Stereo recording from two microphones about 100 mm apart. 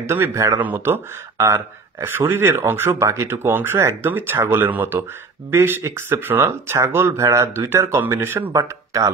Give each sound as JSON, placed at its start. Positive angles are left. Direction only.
{"t": 0.0, "sound": "speech", "side_deg": -25}